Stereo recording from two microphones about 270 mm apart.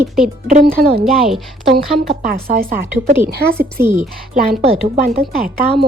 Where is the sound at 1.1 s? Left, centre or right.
Centre.